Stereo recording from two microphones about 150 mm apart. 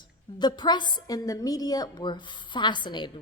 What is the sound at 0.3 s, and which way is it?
A woman's voice, 30° left (ahead or behind).